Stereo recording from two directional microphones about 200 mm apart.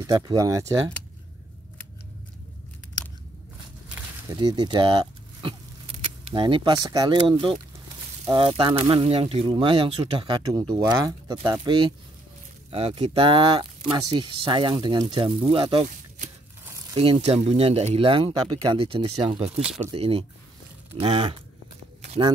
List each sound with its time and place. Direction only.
0.0 s speech: 20° right (ahead or behind)
4.3 s speech: 20° right (ahead or behind)
19.6 s speech: 5° right (ahead or behind)
19.9 s speech: 30° right (ahead or behind)